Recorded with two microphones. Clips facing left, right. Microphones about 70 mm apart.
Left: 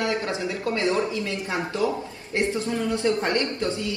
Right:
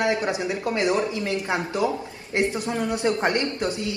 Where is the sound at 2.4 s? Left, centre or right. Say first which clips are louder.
Right 1 dB; right.